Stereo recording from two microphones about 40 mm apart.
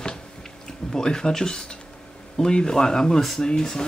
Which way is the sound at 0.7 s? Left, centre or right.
Centre.